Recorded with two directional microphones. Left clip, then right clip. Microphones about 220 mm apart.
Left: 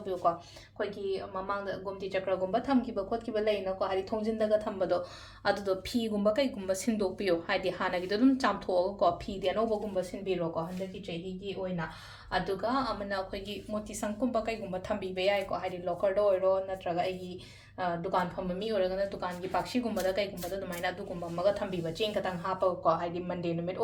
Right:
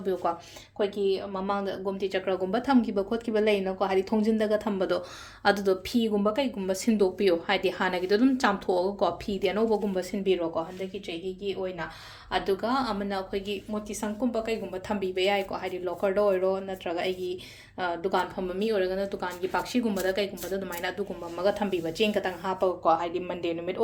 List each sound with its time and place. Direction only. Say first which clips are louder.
1.6 s speech: right 6 dB; 40° right (ahead or behind)
12.3 s speech: right 4 dB; 40° right (ahead or behind); by 20.2 s 25° right (ahead or behind)
21.4 s speech: right 3 dB; 30° right (ahead or behind)